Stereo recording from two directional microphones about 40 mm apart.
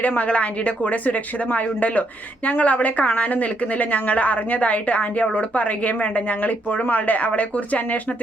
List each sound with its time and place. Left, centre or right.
0.2 s a woman's voice: left